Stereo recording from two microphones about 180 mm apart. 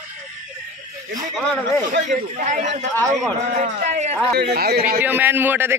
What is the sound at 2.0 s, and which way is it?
Speech, 45° right (ahead or behind).